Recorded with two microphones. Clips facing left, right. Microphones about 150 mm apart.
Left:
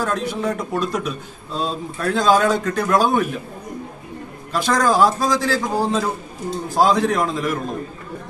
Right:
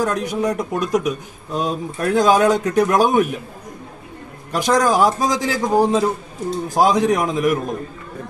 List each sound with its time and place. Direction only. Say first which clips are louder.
0.0 s a man's voice: right 2 dB; 15° right (ahead or behind)
4.5 s a man's voice: right 2 dB; 15° right (ahead or behind)